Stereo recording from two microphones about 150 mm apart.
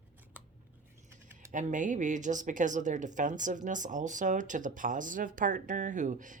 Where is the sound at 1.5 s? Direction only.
60° right (ahead or behind).